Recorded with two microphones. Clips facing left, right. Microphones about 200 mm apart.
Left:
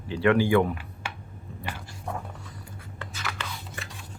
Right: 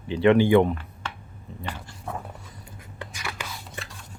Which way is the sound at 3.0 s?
15° right (ahead or behind).